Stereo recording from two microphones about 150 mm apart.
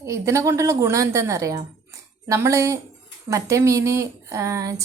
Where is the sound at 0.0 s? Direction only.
20° right (ahead or behind).